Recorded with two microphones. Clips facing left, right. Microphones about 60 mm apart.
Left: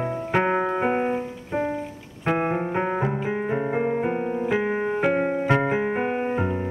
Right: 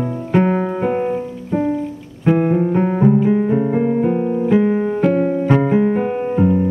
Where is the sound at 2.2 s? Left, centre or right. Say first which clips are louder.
Right 8 dB; left.